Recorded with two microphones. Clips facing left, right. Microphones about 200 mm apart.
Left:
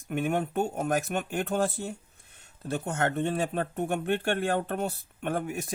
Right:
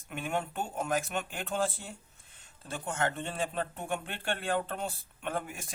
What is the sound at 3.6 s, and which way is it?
Speech, 50° left (ahead or behind).